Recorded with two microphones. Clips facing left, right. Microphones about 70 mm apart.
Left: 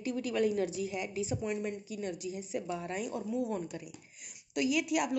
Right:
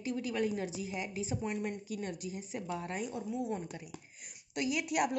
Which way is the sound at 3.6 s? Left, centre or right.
Right.